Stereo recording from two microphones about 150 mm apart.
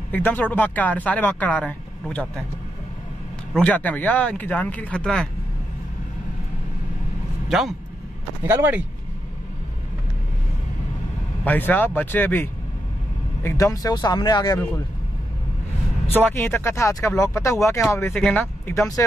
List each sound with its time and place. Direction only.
0.1 s speech: 10° left (ahead or behind)
3.5 s speech: 10° left (ahead or behind)
7.4 s speech: centre (ahead or behind)
8.5 s speech: 15° right (ahead or behind)
11.4 s speech: 10° left (ahead or behind)
16.1 s speech: 15° left (ahead or behind)